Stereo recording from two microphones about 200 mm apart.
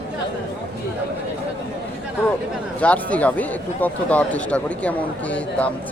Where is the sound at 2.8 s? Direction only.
5° left (ahead or behind).